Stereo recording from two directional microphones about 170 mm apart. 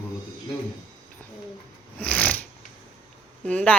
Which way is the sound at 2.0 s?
10° left (ahead or behind).